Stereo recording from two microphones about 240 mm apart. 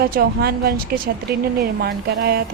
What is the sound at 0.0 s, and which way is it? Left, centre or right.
A woman's voice, right.